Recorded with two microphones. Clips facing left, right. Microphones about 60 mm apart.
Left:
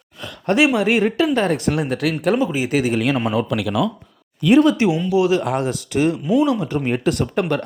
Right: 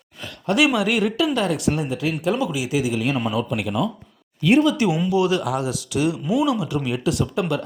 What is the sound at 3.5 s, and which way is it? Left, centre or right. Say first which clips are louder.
Speech: left 3 dB; left.